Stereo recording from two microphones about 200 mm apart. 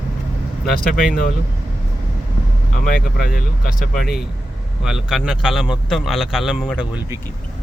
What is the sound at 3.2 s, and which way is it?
Speech, 45° left (ahead or behind).